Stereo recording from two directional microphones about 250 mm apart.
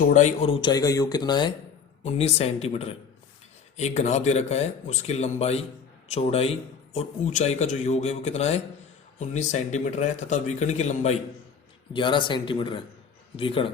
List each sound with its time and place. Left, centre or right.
0.0 s speech: left